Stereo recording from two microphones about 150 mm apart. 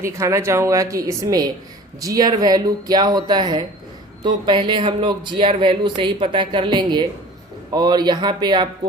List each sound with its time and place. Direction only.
0.0 s speech: 20° right (ahead or behind)